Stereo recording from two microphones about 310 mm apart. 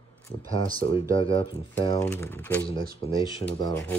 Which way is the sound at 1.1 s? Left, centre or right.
Centre.